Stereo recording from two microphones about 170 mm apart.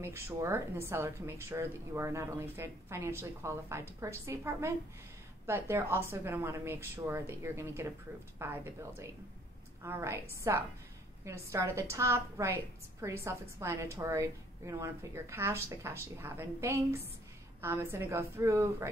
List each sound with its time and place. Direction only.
0.0 s speech: 15° right (ahead or behind)